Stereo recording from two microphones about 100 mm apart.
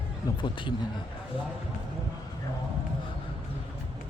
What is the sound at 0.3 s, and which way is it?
Speech, 40° left (ahead or behind).